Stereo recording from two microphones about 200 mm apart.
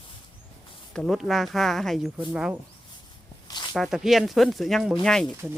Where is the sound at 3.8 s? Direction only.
Centre (ahead or behind).